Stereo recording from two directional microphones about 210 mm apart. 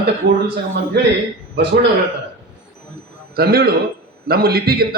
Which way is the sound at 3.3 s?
45° right (ahead or behind).